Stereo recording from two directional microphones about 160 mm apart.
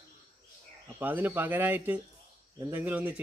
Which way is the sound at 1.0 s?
10° right (ahead or behind).